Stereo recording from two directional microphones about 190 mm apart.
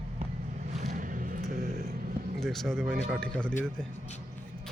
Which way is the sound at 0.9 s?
45° right (ahead or behind).